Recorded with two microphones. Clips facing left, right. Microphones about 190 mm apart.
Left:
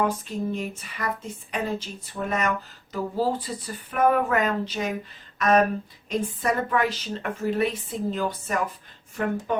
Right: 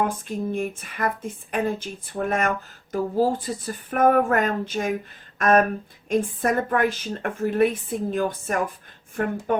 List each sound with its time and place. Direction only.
0.0 s a woman's voice: 50° right (ahead or behind)